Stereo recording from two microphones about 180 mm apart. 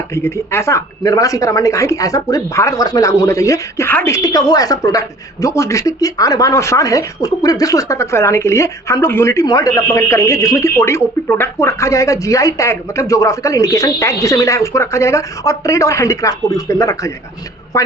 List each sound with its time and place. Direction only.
0.1 s speech: 15° left (ahead or behind)